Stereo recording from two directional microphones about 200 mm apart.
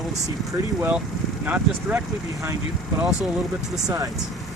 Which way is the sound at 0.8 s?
10° right (ahead or behind).